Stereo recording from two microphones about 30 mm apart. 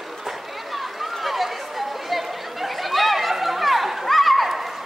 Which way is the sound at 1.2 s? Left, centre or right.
Centre.